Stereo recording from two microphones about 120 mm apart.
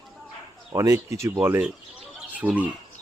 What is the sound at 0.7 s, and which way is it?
Speech, 25° right (ahead or behind).